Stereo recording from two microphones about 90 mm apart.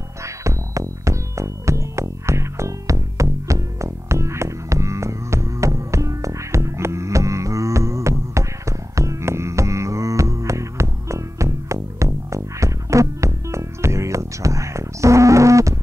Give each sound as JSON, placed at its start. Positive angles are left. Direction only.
{"t": 0.2, "sound": "music", "side_deg": -35}